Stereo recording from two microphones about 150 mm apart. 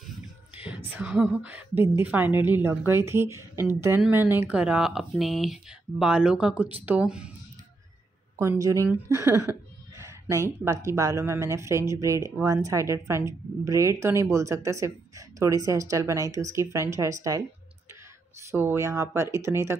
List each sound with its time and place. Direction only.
0.7 s a sound: 10° right (ahead or behind)
1.1 s speech: 5° right (ahead or behind)
8.4 s a woman's voice: 20° right (ahead or behind)
18.5 s a woman's voice: 15° right (ahead or behind)